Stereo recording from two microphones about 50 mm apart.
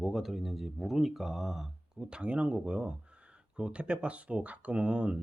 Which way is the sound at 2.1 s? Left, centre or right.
Right.